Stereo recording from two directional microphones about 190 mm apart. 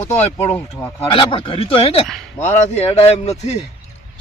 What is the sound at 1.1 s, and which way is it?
A man's voice, 25° left (ahead or behind).